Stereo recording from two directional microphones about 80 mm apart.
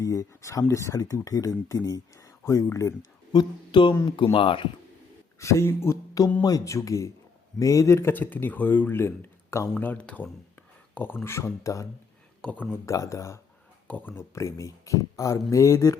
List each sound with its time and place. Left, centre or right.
0.0 s speech: left
3.3 s speech: left
4.2 s speech: left
5.4 s speech: left
6.4 s speech: left
9.7 s speech: left
12.4 s speech: centre
12.7 s speech: left
13.8 s speech: centre
14.3 s speech: left